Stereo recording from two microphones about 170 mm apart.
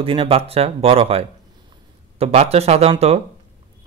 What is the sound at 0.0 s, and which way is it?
Speech, 30° right (ahead or behind).